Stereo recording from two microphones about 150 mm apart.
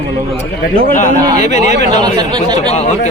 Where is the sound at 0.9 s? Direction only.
55° left (ahead or behind).